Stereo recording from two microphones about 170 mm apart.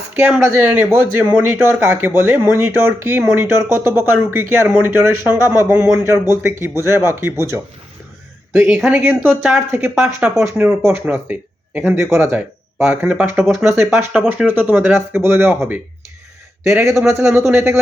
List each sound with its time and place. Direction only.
0.1 s speech: 10° right (ahead or behind)